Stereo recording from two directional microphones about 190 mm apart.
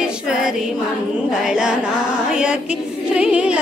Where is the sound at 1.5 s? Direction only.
5° right (ahead or behind).